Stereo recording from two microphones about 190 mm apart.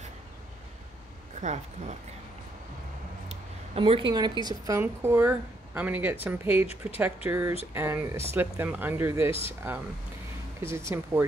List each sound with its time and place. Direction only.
1.4 s speech: 40° right (ahead or behind)
3.3 s speech: 30° right (ahead or behind); by 11.2 s 15° right (ahead or behind)